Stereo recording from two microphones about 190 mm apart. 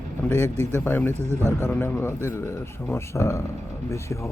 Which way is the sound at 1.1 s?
35° right (ahead or behind).